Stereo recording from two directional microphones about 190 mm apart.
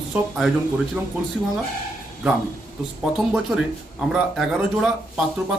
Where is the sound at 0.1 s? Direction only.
Centre (ahead or behind).